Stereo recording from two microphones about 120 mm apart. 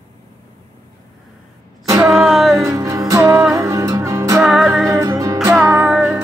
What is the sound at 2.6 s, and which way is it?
Music, 25° right (ahead or behind).